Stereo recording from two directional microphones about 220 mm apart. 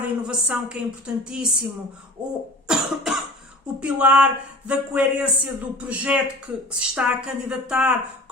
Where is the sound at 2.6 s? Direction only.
Centre (ahead or behind).